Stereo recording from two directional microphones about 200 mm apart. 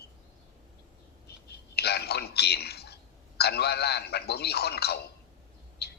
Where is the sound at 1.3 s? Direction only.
55° left (ahead or behind).